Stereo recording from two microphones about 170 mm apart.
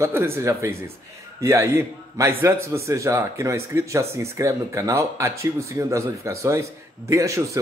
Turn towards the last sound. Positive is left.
turn(degrees=-20)  # may be behind; listen again after turning